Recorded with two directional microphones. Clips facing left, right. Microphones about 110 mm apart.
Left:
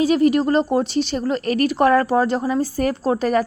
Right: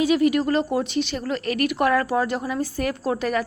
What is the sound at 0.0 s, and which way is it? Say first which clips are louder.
A woman's voice: left 3 dB; 35° left (ahead or behind).